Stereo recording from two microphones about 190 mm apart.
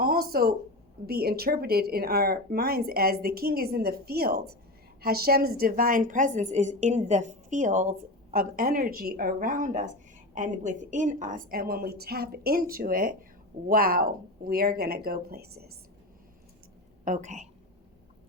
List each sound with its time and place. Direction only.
0.0 s a woman's voice: 50° right (ahead or behind)
17.1 s a woman's voice: 40° right (ahead or behind)